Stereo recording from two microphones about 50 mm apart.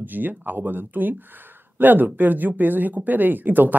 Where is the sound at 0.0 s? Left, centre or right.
Right.